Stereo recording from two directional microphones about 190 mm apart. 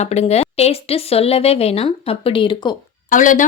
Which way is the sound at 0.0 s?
35° left (ahead or behind).